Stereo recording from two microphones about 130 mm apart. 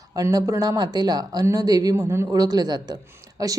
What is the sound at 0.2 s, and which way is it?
Speech, 25° right (ahead or behind).